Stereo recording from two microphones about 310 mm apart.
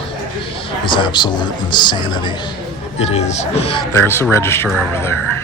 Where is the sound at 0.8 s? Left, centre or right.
Centre.